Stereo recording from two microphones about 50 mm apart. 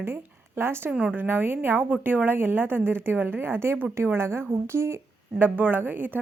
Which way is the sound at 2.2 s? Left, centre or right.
Right.